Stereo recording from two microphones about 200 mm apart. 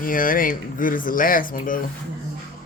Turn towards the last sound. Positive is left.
turn(degrees=45)  # may be behind; listen again after turning